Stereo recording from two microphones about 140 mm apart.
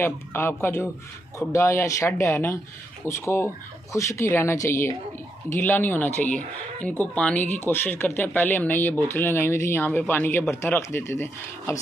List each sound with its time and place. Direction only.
0.0 s speech: 15° left (ahead or behind)